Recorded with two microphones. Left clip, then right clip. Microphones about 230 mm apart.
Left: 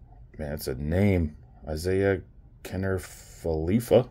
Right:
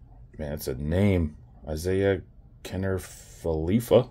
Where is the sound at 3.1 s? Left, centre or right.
Right.